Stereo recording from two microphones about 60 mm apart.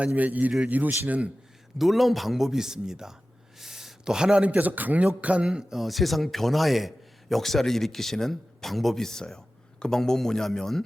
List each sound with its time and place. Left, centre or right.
0.0 s a man's voice: right
1.8 s speech: centre
3.6 s a sound: centre
4.4 s a man's voice: right; by 10.8 s centre